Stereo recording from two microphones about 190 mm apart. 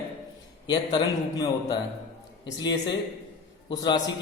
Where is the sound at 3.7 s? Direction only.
20° left (ahead or behind).